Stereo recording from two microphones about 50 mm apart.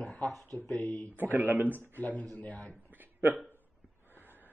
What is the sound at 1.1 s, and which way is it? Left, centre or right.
Speech, right.